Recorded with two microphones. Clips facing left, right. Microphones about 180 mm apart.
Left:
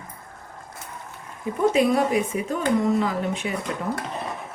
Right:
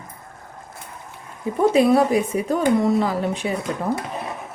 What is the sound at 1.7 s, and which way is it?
Speech, 35° right (ahead or behind).